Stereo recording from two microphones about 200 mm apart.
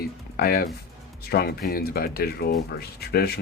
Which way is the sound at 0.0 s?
50° left (ahead or behind).